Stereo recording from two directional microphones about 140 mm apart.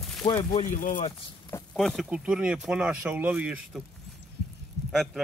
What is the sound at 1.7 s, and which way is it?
Speech, 5° left (ahead or behind).